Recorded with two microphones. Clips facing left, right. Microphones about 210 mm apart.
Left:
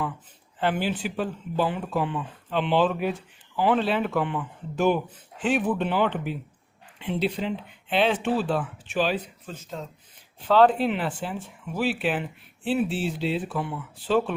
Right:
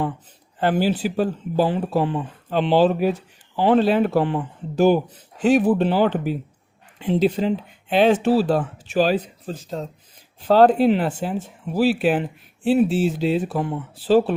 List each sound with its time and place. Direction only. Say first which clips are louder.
0.6 s speech: right 6 dB; 40° right (ahead or behind)